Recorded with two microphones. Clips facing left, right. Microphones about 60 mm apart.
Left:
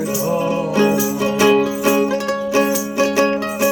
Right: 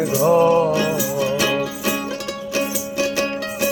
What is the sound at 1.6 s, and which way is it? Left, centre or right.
Music, left.